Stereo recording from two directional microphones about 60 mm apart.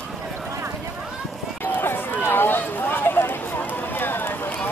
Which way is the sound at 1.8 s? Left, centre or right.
Left.